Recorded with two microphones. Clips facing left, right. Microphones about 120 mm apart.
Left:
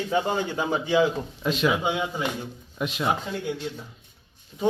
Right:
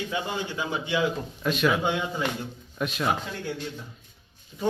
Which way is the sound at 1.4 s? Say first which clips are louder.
Even; 20° left (ahead or behind).